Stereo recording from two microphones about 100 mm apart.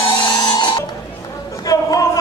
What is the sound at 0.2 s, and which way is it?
Music, 45° left (ahead or behind).